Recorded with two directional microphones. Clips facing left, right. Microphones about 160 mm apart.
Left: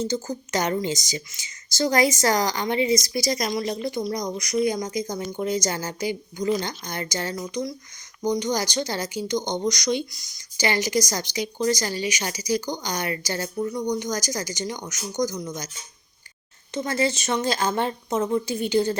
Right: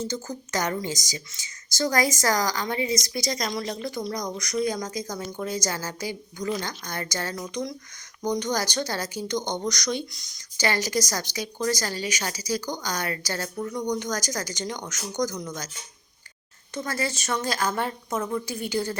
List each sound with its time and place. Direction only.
0.0 s speech: 20° left (ahead or behind)
3.1 s speech: 10° left (ahead or behind)
3.6 s speech: 25° left (ahead or behind)
16.7 s speech: 20° left (ahead or behind)